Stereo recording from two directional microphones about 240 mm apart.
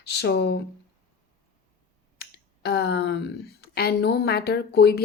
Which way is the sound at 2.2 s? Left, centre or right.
Left.